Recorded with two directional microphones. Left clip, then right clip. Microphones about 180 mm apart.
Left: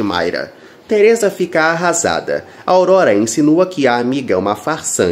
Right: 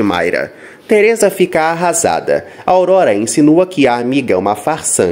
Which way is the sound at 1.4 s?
25° right (ahead or behind).